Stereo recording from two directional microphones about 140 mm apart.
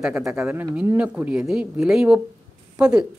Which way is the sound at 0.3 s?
5° right (ahead or behind).